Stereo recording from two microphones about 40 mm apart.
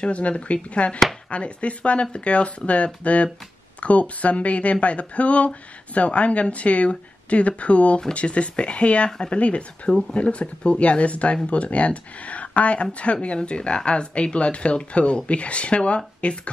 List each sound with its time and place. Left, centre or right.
0.0 s speech: left
9.8 s speech: centre
10.1 s speech: left